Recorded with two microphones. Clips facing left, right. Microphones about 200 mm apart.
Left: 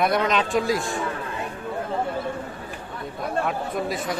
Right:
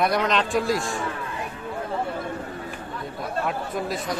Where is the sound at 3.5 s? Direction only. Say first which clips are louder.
Left 1 dB; centre (ahead or behind).